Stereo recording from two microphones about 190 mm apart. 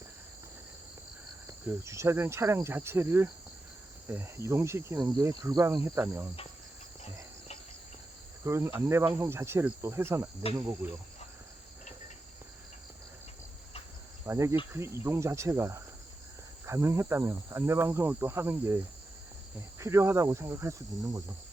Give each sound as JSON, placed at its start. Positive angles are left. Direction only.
{"t": 1.5, "sound": "cricket", "side_deg": -15}
{"t": 5.0, "sound": "speech", "side_deg": -20}
{"t": 5.4, "sound": "cricket", "side_deg": -20}
{"t": 8.4, "sound": "cricket", "side_deg": -15}
{"t": 14.3, "sound": "cricket", "side_deg": -15}